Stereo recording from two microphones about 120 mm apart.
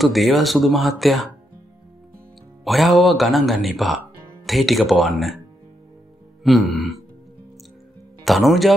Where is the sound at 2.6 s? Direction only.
Centre (ahead or behind).